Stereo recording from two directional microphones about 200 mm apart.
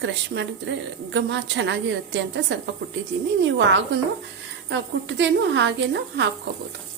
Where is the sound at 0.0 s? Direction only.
65° right (ahead or behind).